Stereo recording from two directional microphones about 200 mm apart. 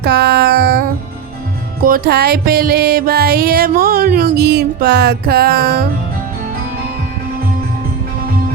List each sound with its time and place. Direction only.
0.0 s child singing: 55° right (ahead or behind)
1.8 s music: 50° right (ahead or behind)